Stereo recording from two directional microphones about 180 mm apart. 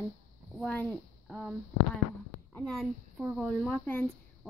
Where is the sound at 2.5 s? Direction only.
5° left (ahead or behind).